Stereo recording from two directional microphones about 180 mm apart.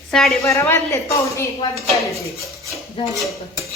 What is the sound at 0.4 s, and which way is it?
A woman's voice, 15° left (ahead or behind).